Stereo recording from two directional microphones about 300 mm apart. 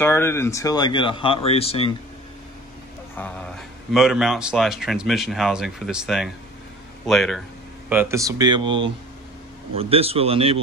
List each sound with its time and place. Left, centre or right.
0.0 s speech: centre
3.2 s speech: centre